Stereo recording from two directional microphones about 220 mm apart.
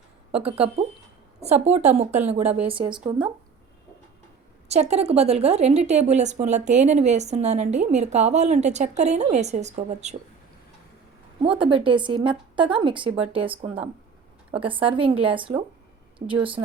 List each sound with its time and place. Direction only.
0.4 s a woman's voice: 25° right (ahead or behind)
4.7 s a woman's voice: 30° right (ahead or behind)
11.4 s a woman's voice: 25° right (ahead or behind)